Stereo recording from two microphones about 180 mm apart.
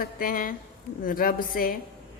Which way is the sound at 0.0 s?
50° left (ahead or behind).